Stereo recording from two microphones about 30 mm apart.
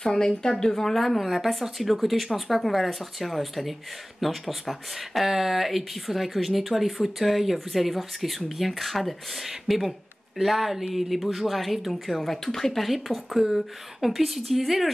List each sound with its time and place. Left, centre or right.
0.0 s speech: centre